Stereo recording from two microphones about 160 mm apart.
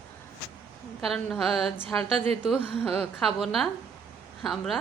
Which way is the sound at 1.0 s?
Centre (ahead or behind).